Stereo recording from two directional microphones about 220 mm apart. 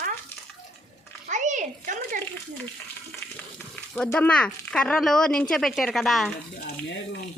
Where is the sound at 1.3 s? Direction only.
35° right (ahead or behind).